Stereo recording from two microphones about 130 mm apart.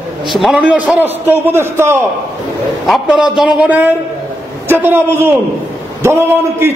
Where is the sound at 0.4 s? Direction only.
5° right (ahead or behind).